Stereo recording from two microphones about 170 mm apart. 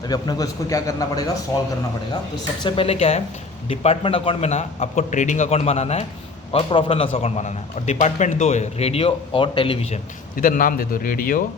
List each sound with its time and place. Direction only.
0.1 s a man's voice: 20° left (ahead or behind)
2.6 s a man's voice: 35° left (ahead or behind)
10.3 s a man's voice: 55° left (ahead or behind)